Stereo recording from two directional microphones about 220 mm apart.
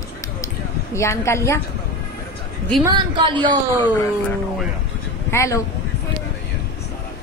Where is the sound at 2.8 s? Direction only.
20° right (ahead or behind).